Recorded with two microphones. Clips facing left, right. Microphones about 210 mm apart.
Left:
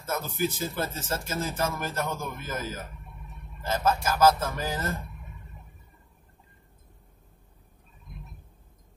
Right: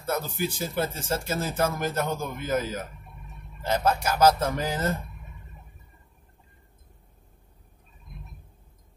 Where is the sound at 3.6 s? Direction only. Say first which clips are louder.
Right 2 dB; 15° right (ahead or behind).